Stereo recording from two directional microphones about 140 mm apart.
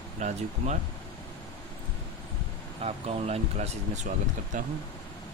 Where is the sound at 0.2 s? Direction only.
60° right (ahead or behind).